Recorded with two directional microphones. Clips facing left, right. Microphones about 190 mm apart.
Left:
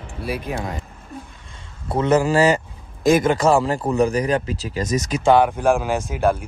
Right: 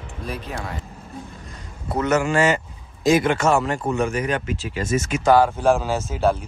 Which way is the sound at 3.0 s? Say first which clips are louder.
Left 2 dB; 50° left (ahead or behind).